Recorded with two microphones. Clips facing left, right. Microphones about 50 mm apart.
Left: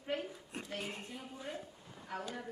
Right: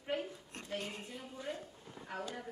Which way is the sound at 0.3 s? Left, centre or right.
Centre.